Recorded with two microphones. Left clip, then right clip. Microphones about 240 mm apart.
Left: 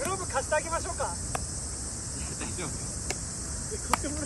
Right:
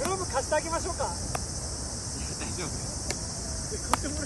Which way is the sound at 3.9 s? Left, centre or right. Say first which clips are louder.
Even; right.